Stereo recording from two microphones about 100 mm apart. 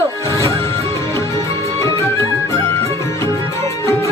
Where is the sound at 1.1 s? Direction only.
30° left (ahead or behind).